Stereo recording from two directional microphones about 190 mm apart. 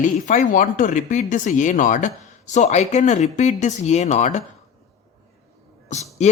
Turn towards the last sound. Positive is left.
turn(degrees=40)  # may be behind; listen again after turning